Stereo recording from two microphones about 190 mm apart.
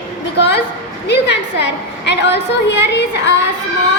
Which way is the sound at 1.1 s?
65° left (ahead or behind).